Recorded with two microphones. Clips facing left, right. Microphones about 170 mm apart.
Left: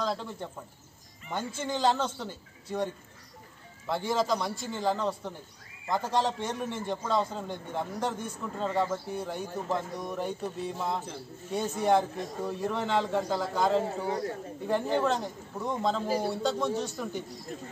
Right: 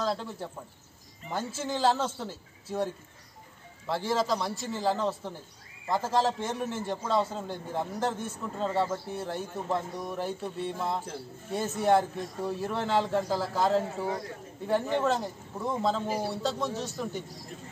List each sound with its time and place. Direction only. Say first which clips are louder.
0.0 s a man's voice: right 1 dB; centre (ahead or behind)
13.8 s a man's voice: left 2 dB; 35° left (ahead or behind)
15.0 s a man's voice: even; 5° right (ahead or behind)